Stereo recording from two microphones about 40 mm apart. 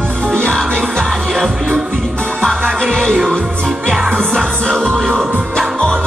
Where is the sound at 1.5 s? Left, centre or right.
Centre.